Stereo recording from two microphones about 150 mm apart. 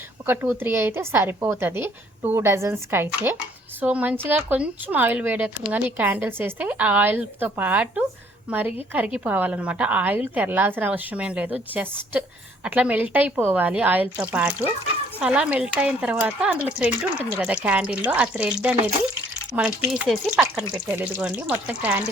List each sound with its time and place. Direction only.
0.3 s a woman's voice: 15° right (ahead or behind)